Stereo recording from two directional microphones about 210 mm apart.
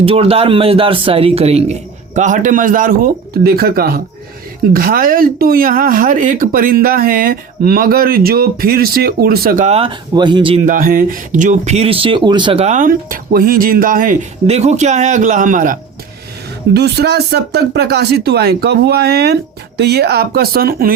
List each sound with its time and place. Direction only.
0.0 s speech: 25° right (ahead or behind)
16.7 s speech: 50° right (ahead or behind)